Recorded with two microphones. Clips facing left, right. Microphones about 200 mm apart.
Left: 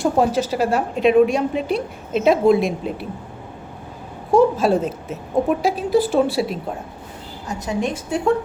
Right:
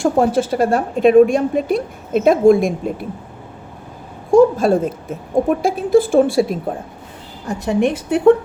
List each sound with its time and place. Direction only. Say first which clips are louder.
0.2 s a woman's voice: right 3 dB; 50° right (ahead or behind)
4.3 s a woman's voice: right 4 dB; 50° right (ahead or behind)
7.4 s a woman's voice: right 6 dB; 60° right (ahead or behind)